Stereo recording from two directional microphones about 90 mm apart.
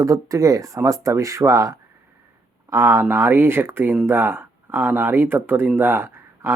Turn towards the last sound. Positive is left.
turn(degrees=-25)  # may be behind; listen again after turning